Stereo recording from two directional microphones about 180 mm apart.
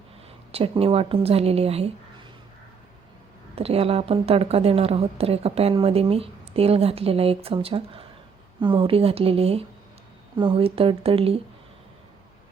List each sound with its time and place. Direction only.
0.5 s a woman's voice: 30° right (ahead or behind)
3.5 s a woman's voice: 35° right (ahead or behind)